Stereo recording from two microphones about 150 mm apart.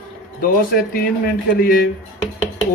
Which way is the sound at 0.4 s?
75° left (ahead or behind).